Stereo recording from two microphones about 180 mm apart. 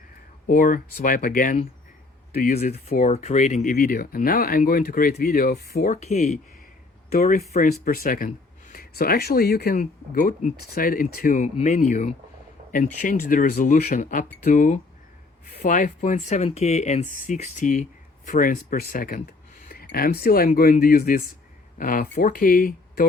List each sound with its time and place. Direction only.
0.4 s speech: 50° left (ahead or behind)
3.1 s speech: 40° left (ahead or behind); by 6.0 s 55° left (ahead or behind)
6.0 s speech: 40° left (ahead or behind)
7.5 s speech: 50° left (ahead or behind)